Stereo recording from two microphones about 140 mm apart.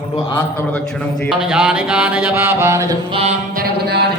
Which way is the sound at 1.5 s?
5° right (ahead or behind).